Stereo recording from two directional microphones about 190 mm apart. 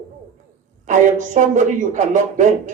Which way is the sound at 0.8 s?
40° right (ahead or behind).